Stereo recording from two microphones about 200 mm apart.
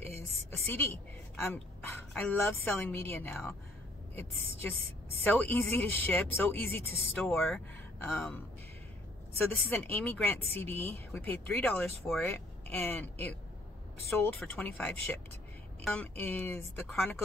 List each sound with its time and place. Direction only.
1.3 s speech: 10° left (ahead or behind)
5.2 s speech: 10° left (ahead or behind)
9.5 s a woman's voice: 10° left (ahead or behind)